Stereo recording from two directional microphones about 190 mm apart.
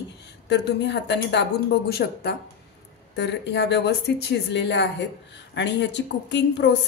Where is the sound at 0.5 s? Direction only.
65° left (ahead or behind).